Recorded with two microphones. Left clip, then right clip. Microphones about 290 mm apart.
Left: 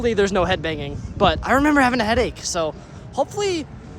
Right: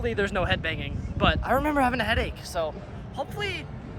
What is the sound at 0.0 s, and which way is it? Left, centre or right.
Speech, left.